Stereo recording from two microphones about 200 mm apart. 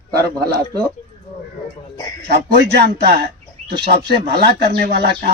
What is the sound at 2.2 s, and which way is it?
A man's voice, 55° right (ahead or behind).